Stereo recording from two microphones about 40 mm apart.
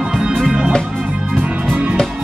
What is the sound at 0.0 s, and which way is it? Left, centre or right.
Music, centre.